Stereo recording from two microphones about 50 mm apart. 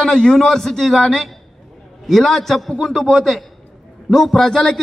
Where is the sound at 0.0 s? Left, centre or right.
Centre.